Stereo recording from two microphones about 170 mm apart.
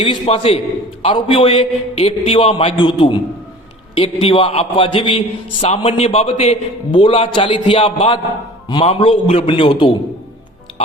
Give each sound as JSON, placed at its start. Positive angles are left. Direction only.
{"t": 0.0, "sound": "a man's voice", "side_deg": 30}
{"t": 3.9, "sound": "a man's voice", "side_deg": 35}